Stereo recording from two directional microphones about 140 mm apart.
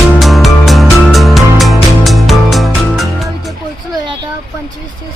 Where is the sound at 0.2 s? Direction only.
Centre (ahead or behind).